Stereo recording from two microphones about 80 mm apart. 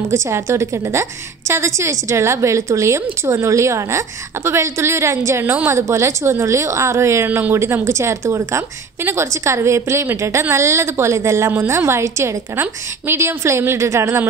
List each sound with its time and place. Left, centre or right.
0.1 s a woman's voice: right
7.2 s speech: right
7.5 s a woman's voice: right